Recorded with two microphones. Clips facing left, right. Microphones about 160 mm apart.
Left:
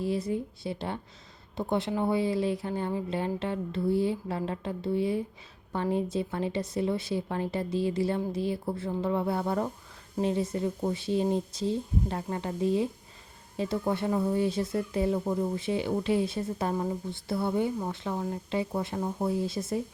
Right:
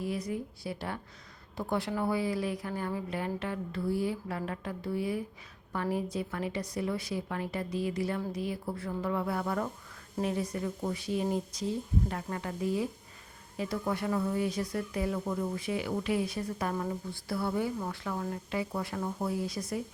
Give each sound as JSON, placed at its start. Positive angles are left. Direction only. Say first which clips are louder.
{"t": 0.0, "sound": "a woman's voice", "louder": "left 5 dB", "side_deg": 30}